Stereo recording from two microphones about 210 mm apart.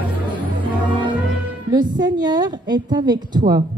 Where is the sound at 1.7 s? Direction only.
20° right (ahead or behind).